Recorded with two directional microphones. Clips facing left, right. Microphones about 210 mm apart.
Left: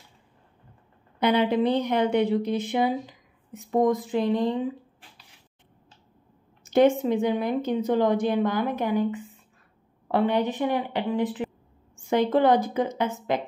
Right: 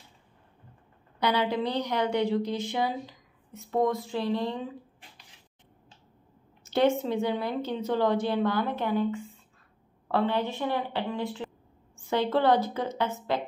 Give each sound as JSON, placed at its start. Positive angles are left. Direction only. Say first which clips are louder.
{"t": 1.2, "sound": "speech", "louder": "left 5 dB", "side_deg": 20}
{"t": 6.6, "sound": "speech", "louder": "left 5 dB", "side_deg": 15}